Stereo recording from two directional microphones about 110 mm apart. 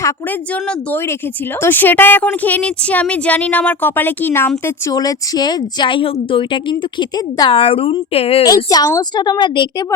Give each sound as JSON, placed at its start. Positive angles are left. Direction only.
{"t": 1.6, "sound": "speech", "side_deg": 20}
{"t": 4.9, "sound": "a woman's voice", "side_deg": 35}
{"t": 8.4, "sound": "a child's voice", "side_deg": 35}